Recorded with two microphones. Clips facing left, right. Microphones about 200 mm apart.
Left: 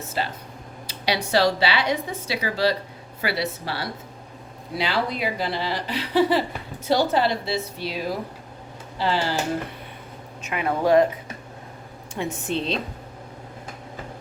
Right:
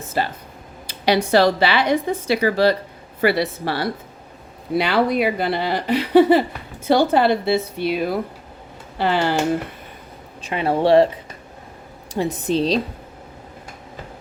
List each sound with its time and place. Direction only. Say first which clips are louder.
0.9 s speech: right 8 dB; 55° right (ahead or behind)
10.4 s speech: right 4 dB; 30° right (ahead or behind)
12.1 s speech: right 6 dB; 35° right (ahead or behind)